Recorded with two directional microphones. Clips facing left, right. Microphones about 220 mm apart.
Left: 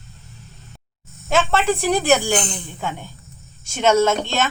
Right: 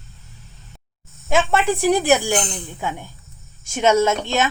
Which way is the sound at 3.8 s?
15° right (ahead or behind).